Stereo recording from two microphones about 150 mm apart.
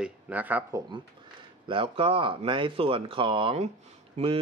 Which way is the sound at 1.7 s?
35° right (ahead or behind).